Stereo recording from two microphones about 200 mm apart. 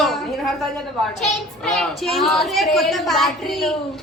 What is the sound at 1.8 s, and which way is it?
A woman's voice, centre (ahead or behind).